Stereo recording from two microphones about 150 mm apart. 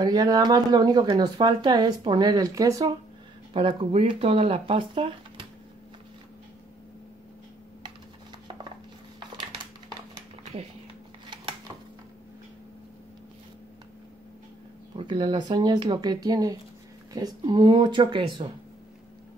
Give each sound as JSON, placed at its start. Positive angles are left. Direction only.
{"t": 0.0, "sound": "speech", "side_deg": -25}
{"t": 3.5, "sound": "speech", "side_deg": -40}
{"t": 15.0, "sound": "speech", "side_deg": -35}